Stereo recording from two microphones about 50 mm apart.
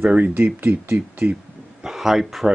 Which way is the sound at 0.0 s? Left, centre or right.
Right.